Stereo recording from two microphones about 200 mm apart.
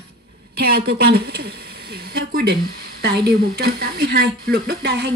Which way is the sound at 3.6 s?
50° right (ahead or behind).